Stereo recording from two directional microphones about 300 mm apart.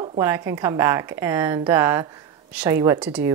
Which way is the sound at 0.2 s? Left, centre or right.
Centre.